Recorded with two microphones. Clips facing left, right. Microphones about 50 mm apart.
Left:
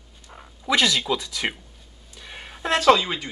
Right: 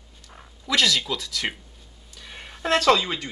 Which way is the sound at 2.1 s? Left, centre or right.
Centre.